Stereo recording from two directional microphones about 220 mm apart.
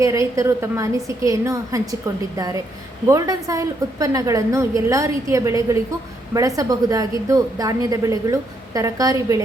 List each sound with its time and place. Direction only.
0.0 s a woman's voice: 15° right (ahead or behind)